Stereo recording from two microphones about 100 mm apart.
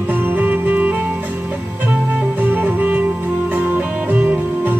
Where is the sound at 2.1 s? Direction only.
15° right (ahead or behind).